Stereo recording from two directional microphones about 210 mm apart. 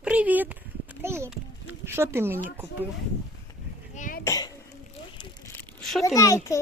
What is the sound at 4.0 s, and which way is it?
Cough, 40° left (ahead or behind).